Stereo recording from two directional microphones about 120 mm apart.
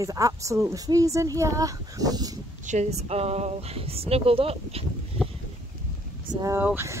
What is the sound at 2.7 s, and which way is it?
A woman's voice, 70° right (ahead or behind).